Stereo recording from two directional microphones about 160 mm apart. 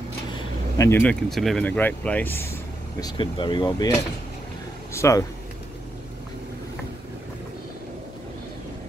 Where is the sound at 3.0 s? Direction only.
30° left (ahead or behind).